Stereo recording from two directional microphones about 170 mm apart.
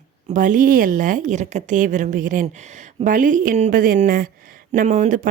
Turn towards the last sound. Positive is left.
turn(degrees=-50)  # may be behind; listen again after turning